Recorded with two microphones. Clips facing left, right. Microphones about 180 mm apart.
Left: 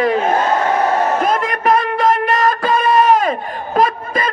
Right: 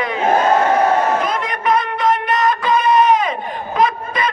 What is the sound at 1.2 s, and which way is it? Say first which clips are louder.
Music: left 4 dB; 50° left (ahead or behind).